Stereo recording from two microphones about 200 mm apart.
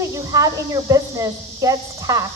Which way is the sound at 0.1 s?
15° right (ahead or behind).